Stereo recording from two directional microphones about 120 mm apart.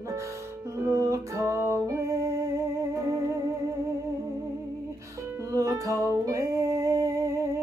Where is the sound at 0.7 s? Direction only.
25° right (ahead or behind).